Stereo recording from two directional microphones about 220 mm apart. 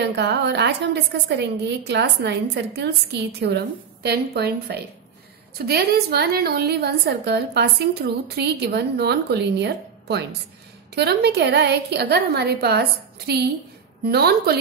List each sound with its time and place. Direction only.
0.0 s a woman's voice: 50° right (ahead or behind)
14.0 s a woman's voice: 45° right (ahead or behind)